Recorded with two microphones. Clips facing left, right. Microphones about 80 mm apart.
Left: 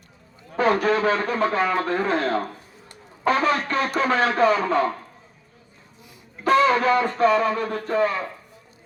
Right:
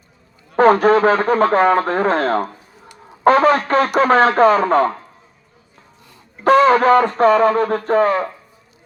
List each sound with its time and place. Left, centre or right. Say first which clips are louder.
0.5 s speech: right 8 dB; right
6.4 s speech: right 6 dB; right